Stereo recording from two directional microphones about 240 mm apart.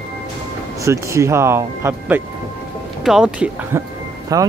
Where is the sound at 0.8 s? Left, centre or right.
Centre.